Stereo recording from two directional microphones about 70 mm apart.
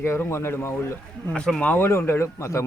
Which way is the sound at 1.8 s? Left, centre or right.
Left.